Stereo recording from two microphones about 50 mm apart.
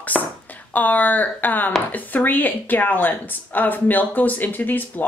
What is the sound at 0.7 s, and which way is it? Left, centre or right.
Speech, left.